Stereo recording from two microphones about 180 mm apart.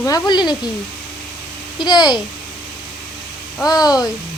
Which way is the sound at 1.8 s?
25° left (ahead or behind).